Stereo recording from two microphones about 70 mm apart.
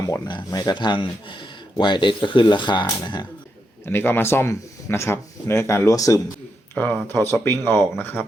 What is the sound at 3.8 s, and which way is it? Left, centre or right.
A man's voice, left.